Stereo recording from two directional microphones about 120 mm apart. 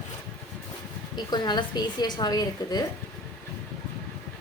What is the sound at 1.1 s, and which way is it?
A woman's voice, 35° left (ahead or behind).